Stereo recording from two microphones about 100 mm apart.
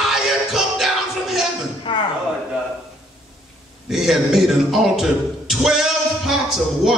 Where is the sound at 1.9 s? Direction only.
55° left (ahead or behind).